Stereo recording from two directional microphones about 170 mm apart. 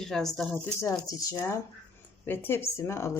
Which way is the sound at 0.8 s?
20° left (ahead or behind).